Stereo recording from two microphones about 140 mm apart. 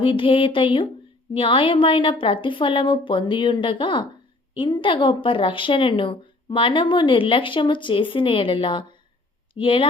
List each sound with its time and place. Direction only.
0.0 s speech: 40° left (ahead or behind)